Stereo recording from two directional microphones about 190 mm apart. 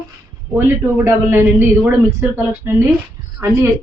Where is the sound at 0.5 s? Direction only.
10° right (ahead or behind).